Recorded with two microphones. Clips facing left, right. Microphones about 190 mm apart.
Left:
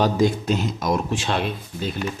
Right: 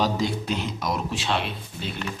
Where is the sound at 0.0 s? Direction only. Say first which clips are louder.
Left 5 dB; 50° left (ahead or behind).